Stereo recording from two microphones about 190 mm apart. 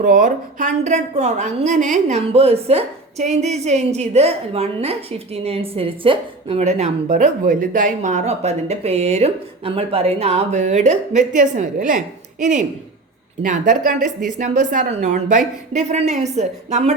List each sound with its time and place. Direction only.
0.0 s a woman's voice: 45° right (ahead or behind)